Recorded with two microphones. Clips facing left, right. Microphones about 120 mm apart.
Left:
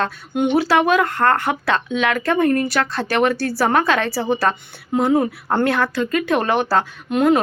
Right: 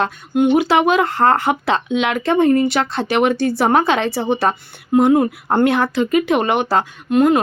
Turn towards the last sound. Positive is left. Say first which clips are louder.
# right 2 dB
turn(degrees=0)  # may be behind; listen again after turning